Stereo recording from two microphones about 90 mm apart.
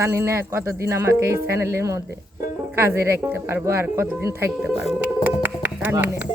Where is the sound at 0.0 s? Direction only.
30° right (ahead or behind).